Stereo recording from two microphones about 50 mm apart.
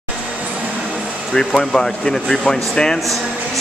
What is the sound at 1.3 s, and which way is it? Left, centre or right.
Speech, centre.